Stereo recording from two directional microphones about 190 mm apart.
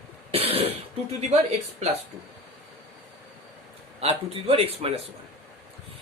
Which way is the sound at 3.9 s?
30° right (ahead or behind).